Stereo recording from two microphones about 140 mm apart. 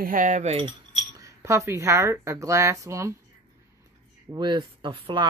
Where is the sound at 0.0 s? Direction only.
70° right (ahead or behind); by 0.7 s 50° right (ahead or behind).